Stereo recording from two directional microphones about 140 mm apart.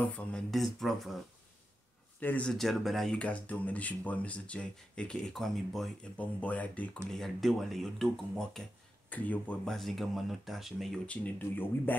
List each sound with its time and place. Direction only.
0.0 s speech: 5° left (ahead or behind)
2.1 s speech: 10° left (ahead or behind)